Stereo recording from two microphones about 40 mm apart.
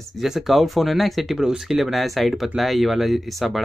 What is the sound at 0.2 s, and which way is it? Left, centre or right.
Speech, centre.